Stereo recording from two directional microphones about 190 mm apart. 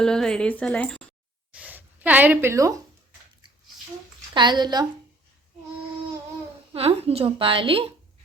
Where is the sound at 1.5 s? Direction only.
5° right (ahead or behind).